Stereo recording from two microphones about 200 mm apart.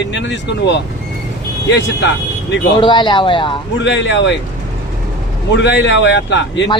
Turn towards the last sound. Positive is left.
turn(degrees=60)  # may be behind; listen again after turning